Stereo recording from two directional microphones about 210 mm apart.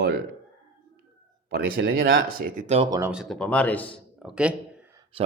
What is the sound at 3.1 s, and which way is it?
Speech, centre (ahead or behind).